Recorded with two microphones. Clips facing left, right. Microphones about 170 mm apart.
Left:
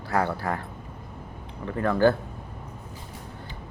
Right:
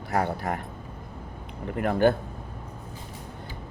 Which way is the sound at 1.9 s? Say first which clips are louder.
Left 1 dB; 20° right (ahead or behind).